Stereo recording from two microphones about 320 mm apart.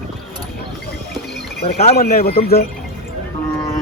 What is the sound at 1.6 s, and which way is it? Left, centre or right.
Speech, left.